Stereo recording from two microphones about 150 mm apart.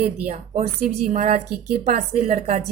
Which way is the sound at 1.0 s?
55° right (ahead or behind).